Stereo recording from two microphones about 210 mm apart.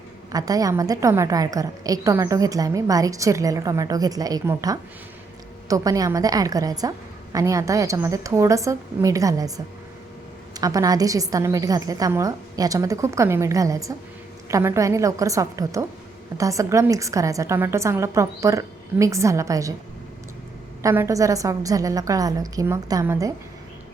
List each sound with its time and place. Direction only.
0.3 s a woman's voice: 15° right (ahead or behind)
10.5 s a woman's voice: 15° right (ahead or behind)
20.8 s a woman's voice: 15° right (ahead or behind)